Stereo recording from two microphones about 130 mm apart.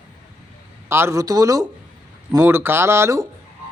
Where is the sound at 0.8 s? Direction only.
20° right (ahead or behind).